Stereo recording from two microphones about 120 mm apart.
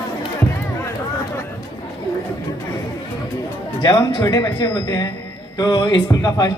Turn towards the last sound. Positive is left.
turn(degrees=35)  # may be behind; listen again after turning